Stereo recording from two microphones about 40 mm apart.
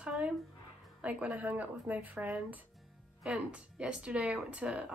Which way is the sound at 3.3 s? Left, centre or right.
Right.